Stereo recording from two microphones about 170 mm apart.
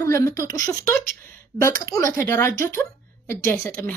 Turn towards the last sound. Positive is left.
turn(degrees=15)  # may be behind; listen again after turning